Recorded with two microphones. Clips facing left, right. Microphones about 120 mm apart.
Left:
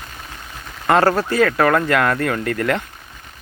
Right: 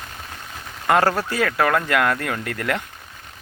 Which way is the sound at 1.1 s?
10° right (ahead or behind).